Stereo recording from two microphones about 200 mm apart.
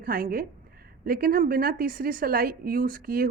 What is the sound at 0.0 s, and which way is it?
A woman's voice, 50° right (ahead or behind).